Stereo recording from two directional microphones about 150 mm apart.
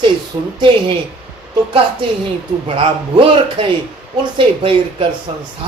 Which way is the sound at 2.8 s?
35° right (ahead or behind).